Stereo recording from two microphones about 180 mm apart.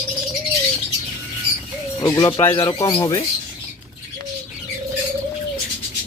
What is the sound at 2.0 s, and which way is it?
Speech, 20° left (ahead or behind).